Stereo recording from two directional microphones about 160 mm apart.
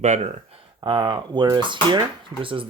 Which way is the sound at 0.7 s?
25° right (ahead or behind).